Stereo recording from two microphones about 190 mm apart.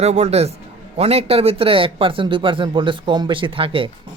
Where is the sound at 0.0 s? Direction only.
35° right (ahead or behind).